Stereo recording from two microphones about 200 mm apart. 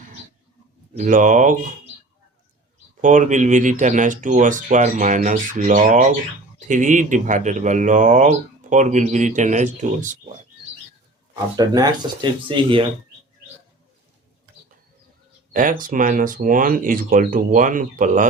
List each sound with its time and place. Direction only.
0.9 s speech: 40° right (ahead or behind)
3.0 s speech: 40° right (ahead or behind)
11.5 s speech: 20° right (ahead or behind)
15.5 s speech: 40° right (ahead or behind)